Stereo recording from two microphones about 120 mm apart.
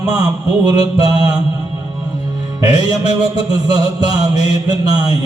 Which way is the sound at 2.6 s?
30° right (ahead or behind).